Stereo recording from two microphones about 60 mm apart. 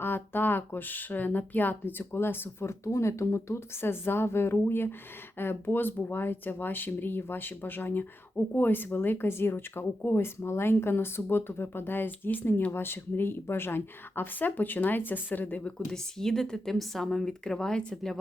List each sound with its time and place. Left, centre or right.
0.0 s speech: left
15.9 s speech: centre